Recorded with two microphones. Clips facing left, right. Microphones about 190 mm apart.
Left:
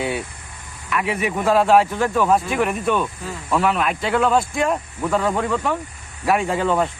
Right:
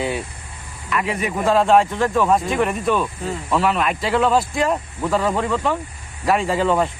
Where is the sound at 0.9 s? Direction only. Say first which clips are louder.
Even; 5° left (ahead or behind).